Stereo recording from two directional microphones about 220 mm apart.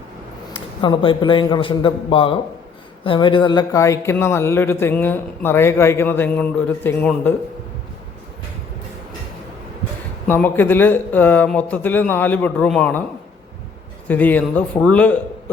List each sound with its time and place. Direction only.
0.5 s a man's voice: 20° left (ahead or behind)
10.2 s speech: 10° left (ahead or behind)
14.1 s speech: 5° left (ahead or behind)